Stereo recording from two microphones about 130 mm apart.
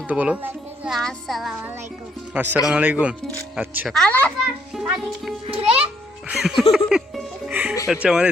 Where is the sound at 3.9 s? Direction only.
10° left (ahead or behind).